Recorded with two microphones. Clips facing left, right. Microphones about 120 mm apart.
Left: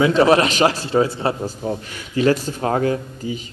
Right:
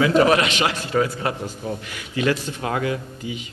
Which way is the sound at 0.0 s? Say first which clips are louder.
Left 2 dB; 30° left (ahead or behind).